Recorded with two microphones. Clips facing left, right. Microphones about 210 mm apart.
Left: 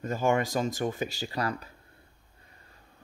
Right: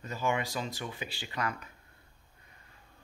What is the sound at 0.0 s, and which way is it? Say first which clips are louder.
Speech: left 6 dB; 45° left (ahead or behind).